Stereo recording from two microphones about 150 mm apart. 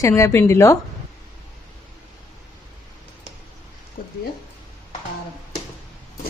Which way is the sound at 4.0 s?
75° left (ahead or behind).